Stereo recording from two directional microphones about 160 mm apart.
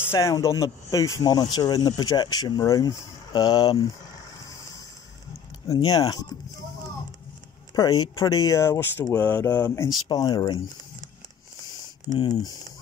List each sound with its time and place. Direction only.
0.1 s speech: 20° left (ahead or behind)
5.9 s speech: 25° left (ahead or behind)
7.7 s speech: 25° left (ahead or behind)
12.1 s speech: 35° left (ahead or behind)